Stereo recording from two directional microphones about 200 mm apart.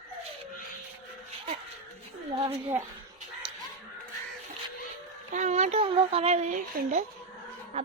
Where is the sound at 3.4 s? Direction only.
25° right (ahead or behind).